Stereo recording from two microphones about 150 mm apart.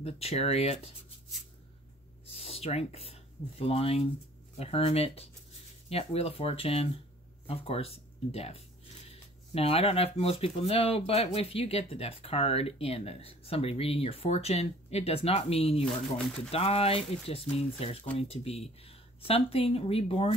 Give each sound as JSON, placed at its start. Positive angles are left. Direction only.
{"t": 0.0, "sound": "speech", "side_deg": 45}
{"t": 2.3, "sound": "speech", "side_deg": 40}